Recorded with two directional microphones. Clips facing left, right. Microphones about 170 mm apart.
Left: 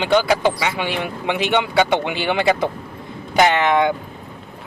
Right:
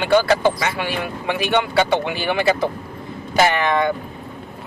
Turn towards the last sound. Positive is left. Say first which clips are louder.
# left 2 dB
turn(degrees=15)  # may be behind; listen again after turning